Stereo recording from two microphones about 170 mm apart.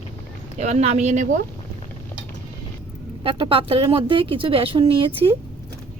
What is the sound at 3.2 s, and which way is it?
Speech, 30° right (ahead or behind).